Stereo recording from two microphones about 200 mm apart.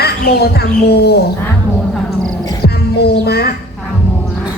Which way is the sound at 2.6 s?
55° left (ahead or behind).